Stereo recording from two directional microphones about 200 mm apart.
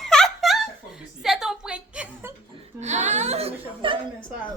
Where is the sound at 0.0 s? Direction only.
Centre (ahead or behind).